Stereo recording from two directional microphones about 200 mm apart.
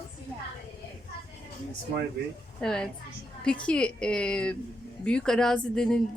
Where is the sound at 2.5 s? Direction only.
5° left (ahead or behind).